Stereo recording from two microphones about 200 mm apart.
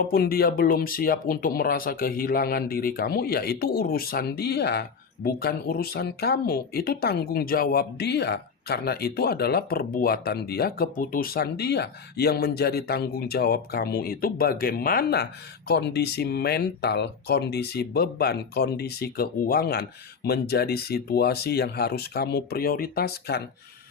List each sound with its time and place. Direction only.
0.0 s speech: 50° left (ahead or behind)